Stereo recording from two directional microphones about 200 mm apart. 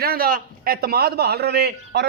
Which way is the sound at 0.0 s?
50° right (ahead or behind).